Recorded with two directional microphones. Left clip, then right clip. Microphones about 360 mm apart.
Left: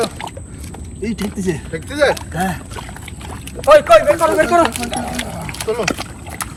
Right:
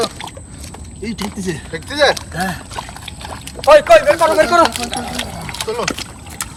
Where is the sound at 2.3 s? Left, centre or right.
Centre.